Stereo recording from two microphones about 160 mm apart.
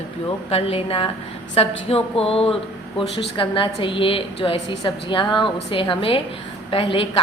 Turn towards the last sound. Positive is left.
turn(degrees=35)  # may be behind; listen again after turning